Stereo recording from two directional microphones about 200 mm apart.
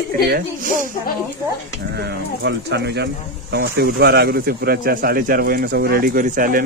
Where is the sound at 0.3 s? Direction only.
45° right (ahead or behind).